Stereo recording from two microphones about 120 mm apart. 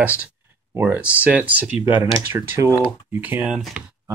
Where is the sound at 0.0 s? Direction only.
10° right (ahead or behind).